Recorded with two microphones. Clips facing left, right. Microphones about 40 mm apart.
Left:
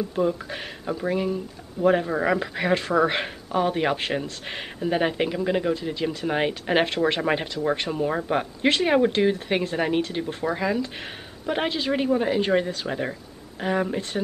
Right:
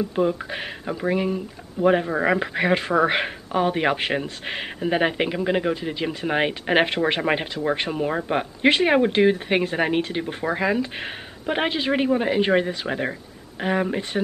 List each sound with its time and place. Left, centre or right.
0.1 s speech: right